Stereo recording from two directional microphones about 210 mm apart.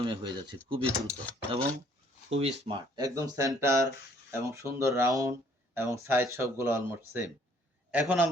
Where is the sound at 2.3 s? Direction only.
25° right (ahead or behind).